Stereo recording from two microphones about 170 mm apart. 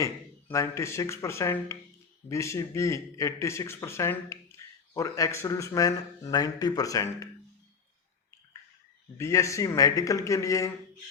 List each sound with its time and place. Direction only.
0.0 s speech: 20° left (ahead or behind)
9.1 s speech: 15° left (ahead or behind)